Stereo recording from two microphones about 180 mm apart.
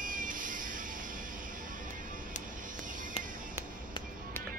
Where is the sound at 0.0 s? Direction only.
50° right (ahead or behind).